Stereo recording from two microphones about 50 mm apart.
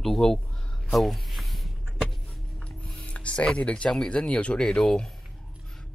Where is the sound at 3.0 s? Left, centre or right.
Left.